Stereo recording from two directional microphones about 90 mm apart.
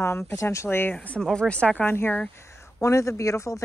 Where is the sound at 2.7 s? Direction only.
35° left (ahead or behind).